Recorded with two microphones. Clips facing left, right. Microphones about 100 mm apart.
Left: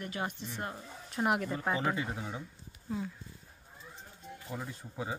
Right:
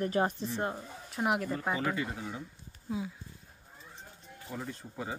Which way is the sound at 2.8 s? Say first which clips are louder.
Right 1 dB; 5° right (ahead or behind).